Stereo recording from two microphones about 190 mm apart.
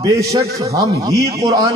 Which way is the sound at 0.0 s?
20° right (ahead or behind).